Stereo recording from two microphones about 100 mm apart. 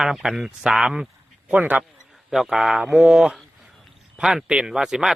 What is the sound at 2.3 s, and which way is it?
A man's voice, 5° right (ahead or behind).